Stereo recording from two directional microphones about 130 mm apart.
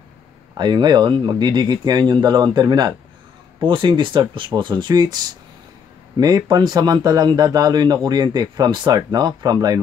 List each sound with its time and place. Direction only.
0.6 s a man's voice: 35° right (ahead or behind)